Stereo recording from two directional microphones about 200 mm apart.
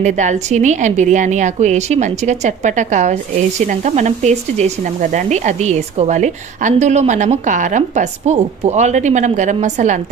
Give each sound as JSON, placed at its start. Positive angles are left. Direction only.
{"t": 0.0, "sound": "speech", "side_deg": -35}